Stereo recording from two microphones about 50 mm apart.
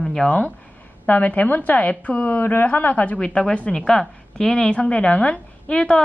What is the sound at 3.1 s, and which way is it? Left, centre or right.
A woman's voice, centre.